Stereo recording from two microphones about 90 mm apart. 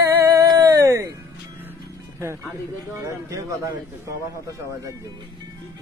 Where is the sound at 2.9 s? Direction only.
35° right (ahead or behind).